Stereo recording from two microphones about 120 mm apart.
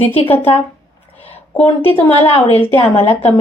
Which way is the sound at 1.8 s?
55° left (ahead or behind).